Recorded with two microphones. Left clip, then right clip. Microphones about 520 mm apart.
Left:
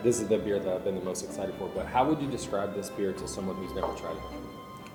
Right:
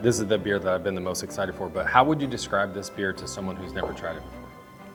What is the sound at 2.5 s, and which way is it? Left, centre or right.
Speech, right.